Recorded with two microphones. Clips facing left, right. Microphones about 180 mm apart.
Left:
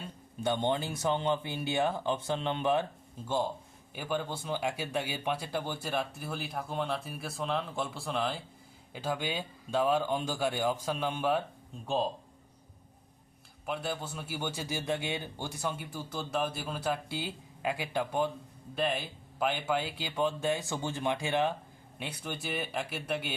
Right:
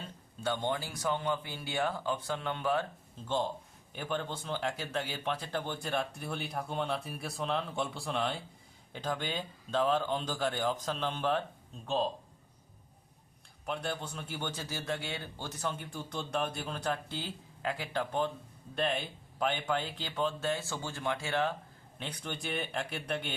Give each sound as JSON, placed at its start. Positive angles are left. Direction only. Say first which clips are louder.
{"t": 0.4, "sound": "a man's voice", "louder": "left 3 dB", "side_deg": 20}
{"t": 13.7, "sound": "a man's voice", "louder": "left 1 dB", "side_deg": 5}